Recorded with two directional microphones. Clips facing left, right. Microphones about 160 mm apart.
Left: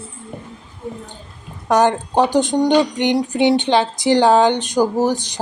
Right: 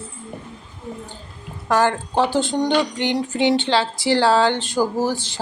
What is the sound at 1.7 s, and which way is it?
Speech, 15° left (ahead or behind).